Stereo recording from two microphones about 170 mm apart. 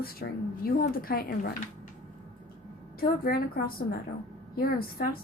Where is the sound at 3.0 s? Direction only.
60° left (ahead or behind).